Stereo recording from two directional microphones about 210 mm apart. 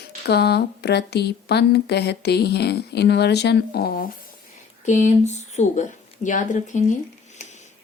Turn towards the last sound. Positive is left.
turn(degrees=35)  # may be behind; listen again after turning